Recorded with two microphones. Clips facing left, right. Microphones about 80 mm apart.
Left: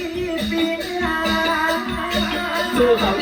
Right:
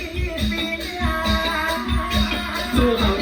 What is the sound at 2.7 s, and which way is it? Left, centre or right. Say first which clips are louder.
Music: left 3 dB; left.